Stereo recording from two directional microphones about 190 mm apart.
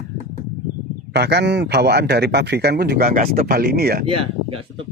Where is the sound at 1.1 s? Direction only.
60° right (ahead or behind).